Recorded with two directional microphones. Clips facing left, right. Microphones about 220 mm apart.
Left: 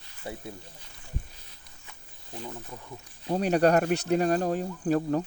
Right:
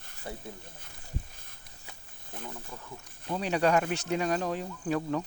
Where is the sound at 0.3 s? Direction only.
15° left (ahead or behind).